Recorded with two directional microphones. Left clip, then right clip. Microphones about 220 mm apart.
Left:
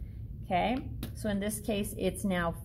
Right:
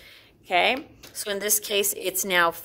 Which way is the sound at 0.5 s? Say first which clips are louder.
Right 8 dB; 45° right (ahead or behind).